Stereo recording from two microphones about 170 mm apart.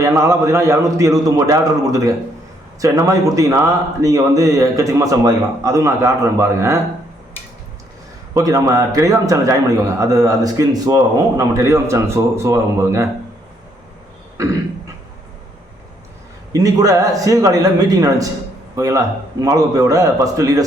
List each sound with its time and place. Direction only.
0.0 s a man's voice: 15° right (ahead or behind)
8.3 s a man's voice: 20° right (ahead or behind)
16.5 s a man's voice: 20° right (ahead or behind)